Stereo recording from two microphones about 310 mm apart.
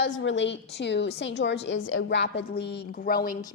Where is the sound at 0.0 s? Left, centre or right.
Left.